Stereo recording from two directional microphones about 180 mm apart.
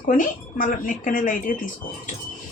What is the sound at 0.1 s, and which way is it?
Speech, 50° left (ahead or behind).